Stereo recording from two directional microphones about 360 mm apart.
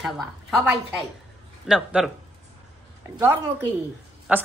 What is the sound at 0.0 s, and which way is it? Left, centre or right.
Speech, centre.